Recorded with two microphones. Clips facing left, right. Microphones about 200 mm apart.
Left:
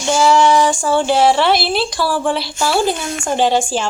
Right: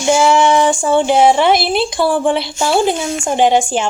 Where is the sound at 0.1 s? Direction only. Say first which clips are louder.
Right 1 dB; 20° right (ahead or behind).